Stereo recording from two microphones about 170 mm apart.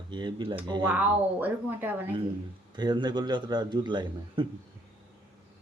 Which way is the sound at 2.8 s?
25° right (ahead or behind).